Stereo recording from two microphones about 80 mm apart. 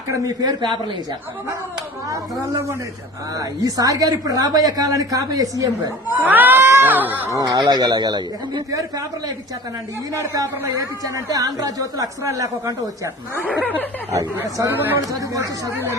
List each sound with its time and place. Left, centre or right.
0.1 s a man's voice: right
3.3 s a woman's voice: right
6.1 s speech: right
7.3 s a woman's voice: right
10.2 s a woman's voice: right
14.7 s speech: right
14.9 s a woman's voice: right